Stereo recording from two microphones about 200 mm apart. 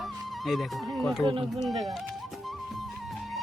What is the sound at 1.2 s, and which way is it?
Speech, 25° right (ahead or behind).